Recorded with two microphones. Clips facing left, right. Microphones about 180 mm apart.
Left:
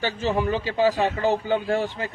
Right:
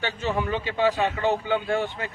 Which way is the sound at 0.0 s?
40° left (ahead or behind).